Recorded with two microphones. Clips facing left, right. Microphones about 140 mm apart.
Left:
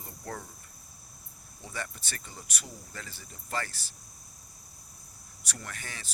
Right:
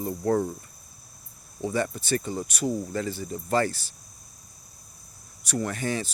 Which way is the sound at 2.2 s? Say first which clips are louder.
Right 18 dB; 50° right (ahead or behind).